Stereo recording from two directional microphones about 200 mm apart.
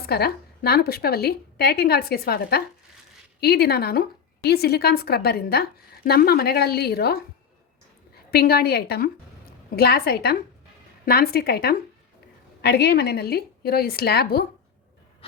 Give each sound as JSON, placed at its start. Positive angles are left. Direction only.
{"t": 0.1, "sound": "a woman's voice", "side_deg": 50}
{"t": 8.3, "sound": "a woman's voice", "side_deg": 50}
{"t": 15.2, "sound": "a sound", "side_deg": 30}